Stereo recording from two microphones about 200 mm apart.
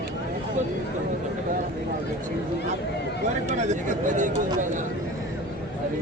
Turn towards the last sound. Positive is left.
turn(degrees=-40)  # may be behind; listen again after turning